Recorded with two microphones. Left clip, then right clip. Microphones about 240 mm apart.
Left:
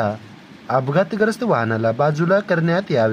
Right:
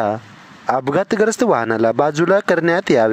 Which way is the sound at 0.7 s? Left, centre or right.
Right.